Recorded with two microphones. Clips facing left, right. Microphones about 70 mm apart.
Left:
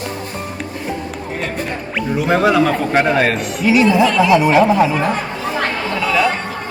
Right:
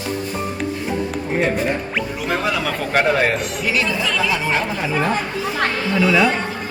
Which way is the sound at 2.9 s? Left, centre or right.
Centre.